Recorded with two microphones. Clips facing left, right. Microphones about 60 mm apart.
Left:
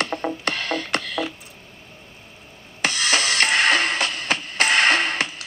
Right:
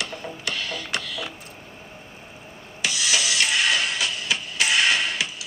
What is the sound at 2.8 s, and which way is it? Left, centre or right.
Music, left.